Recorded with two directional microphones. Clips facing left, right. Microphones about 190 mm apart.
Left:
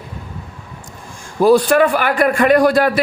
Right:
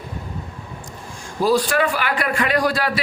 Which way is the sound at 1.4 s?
55° left (ahead or behind).